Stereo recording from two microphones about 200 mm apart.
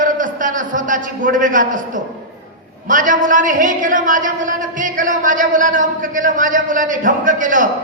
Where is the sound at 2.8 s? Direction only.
40° right (ahead or behind).